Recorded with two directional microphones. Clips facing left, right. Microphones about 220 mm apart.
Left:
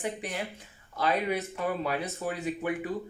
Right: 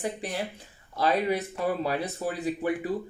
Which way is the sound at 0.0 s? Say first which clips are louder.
Right 2 dB; 35° right (ahead or behind).